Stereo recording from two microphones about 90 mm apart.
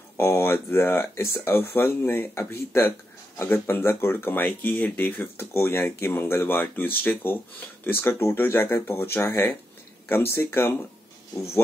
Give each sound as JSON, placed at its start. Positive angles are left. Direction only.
{"t": 0.2, "sound": "speech", "side_deg": 25}